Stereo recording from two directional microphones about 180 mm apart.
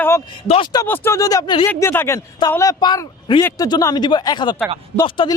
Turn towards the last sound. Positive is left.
turn(degrees=20)  # may be behind; listen again after turning